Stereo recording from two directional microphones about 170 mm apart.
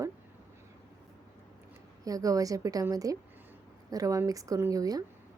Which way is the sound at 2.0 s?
20° right (ahead or behind).